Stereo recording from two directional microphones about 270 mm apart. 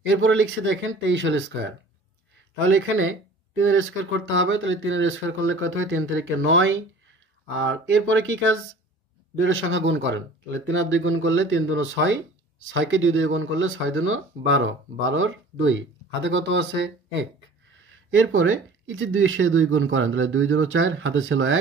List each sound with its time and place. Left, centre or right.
0.1 s speech: right